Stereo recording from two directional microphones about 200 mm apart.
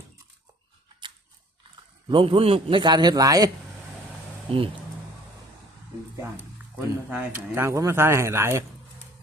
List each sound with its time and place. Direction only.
2.0 s a man's voice: 25° right (ahead or behind)
7.1 s speech: 10° right (ahead or behind)